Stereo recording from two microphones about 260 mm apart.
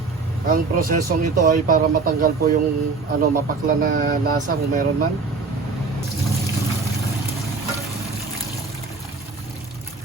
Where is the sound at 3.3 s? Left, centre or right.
Right.